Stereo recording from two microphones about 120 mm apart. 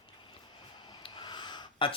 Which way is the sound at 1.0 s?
40° left (ahead or behind).